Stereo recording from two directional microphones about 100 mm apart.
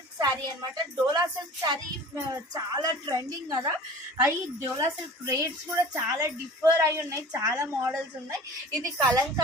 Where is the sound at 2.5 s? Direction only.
40° right (ahead or behind).